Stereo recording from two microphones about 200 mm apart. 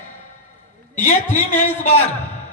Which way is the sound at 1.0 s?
40° left (ahead or behind).